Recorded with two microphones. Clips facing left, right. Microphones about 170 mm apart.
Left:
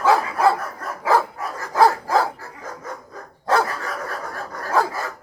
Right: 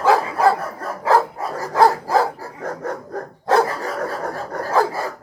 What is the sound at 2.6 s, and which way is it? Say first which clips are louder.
Dog: right 8 dB; 65° right (ahead or behind).